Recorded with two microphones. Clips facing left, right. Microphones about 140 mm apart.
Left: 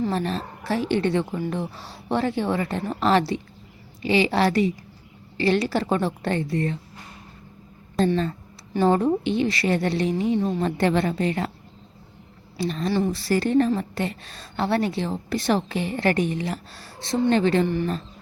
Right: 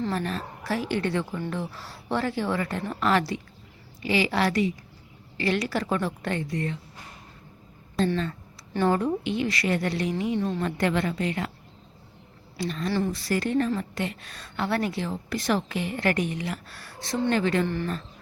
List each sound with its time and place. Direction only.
0.1 s a woman's voice: 25° left (ahead or behind)
8.0 s a woman's voice: 35° left (ahead or behind)
8.7 s a woman's voice: 20° left (ahead or behind)
9.0 s a woman's voice: 30° left (ahead or behind)
12.5 s a woman's voice: 30° left (ahead or behind)